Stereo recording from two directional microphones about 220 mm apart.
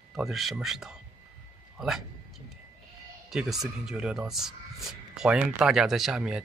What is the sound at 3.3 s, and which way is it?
Speech, centre (ahead or behind).